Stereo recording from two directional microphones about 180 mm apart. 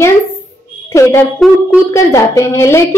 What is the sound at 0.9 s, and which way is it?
Speech, 15° left (ahead or behind).